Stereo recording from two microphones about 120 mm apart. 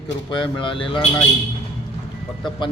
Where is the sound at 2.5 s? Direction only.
40° left (ahead or behind).